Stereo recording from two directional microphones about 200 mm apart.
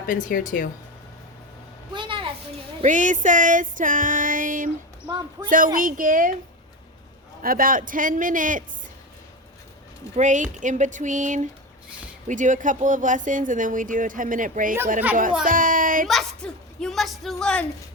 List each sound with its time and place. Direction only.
0.0 s speech: 40° left (ahead or behind)
1.9 s a sound: 25° right (ahead or behind)
2.8 s speech: 40° right (ahead or behind)
5.0 s a man's voice: 20° right (ahead or behind)
5.5 s a woman's voice: 45° right (ahead or behind)
7.4 s speech: 45° right (ahead or behind)
10.2 s speech: 40° right (ahead or behind)
15.4 s a sound: 45° right (ahead or behind)
16.0 s a woman's voice: centre (ahead or behind)